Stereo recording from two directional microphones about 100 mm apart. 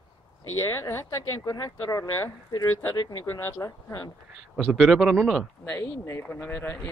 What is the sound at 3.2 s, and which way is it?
Speech, 30° left (ahead or behind).